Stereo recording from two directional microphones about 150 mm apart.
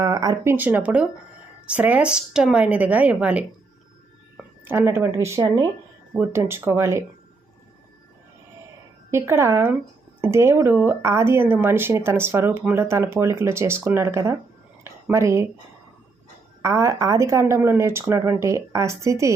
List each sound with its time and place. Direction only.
0.0 s speech: 25° right (ahead or behind)
0.5 s speech: 10° right (ahead or behind)
4.6 s speech: 15° right (ahead or behind)
9.0 s speech: 15° right (ahead or behind)
16.6 s speech: 20° right (ahead or behind)